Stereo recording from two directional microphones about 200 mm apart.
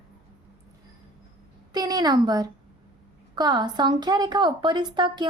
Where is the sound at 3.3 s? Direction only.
20° right (ahead or behind).